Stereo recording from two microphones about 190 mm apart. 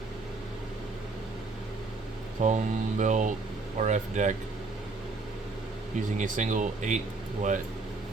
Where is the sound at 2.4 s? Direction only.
40° right (ahead or behind).